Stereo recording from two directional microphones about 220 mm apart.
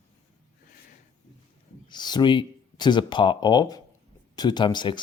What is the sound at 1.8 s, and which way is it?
Speech, 20° left (ahead or behind).